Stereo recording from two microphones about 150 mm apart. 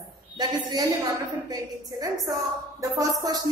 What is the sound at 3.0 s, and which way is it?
Speech, 25° right (ahead or behind).